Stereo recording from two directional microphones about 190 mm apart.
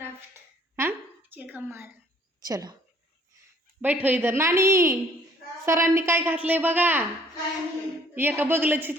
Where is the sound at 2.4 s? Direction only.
20° right (ahead or behind).